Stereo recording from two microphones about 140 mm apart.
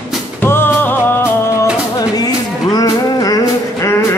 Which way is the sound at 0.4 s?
15° left (ahead or behind).